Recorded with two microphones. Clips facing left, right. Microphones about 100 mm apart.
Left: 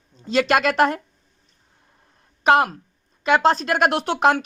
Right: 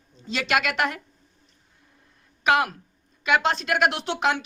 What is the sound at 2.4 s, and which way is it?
A woman's voice, 30° left (ahead or behind).